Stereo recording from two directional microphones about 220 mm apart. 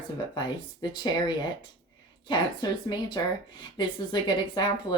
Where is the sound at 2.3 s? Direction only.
20° left (ahead or behind).